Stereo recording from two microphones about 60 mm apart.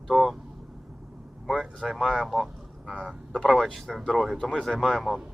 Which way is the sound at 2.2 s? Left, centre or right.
Centre.